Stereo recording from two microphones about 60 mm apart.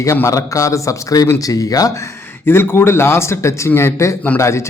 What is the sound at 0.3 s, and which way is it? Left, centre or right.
A man's voice, left.